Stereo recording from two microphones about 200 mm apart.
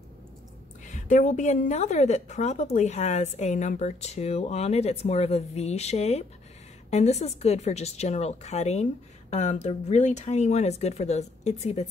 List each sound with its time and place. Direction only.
0.8 s a woman's voice: 40° left (ahead or behind)